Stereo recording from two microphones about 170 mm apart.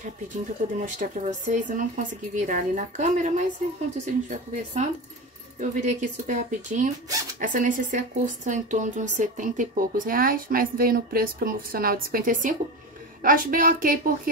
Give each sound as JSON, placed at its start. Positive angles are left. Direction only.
{"t": 0.7, "sound": "a woman's voice", "side_deg": -45}